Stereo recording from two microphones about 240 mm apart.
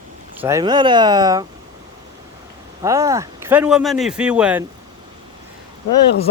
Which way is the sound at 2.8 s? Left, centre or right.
Centre.